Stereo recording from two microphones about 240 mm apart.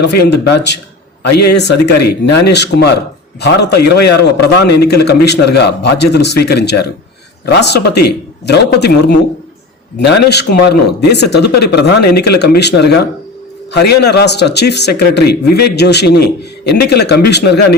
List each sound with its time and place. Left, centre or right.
0.2 s speech: left